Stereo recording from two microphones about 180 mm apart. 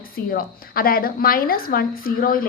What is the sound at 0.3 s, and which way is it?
A woman's voice, 55° left (ahead or behind).